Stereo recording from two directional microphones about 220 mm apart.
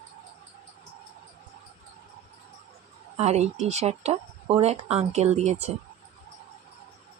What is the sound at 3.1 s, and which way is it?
Speech, 30° right (ahead or behind).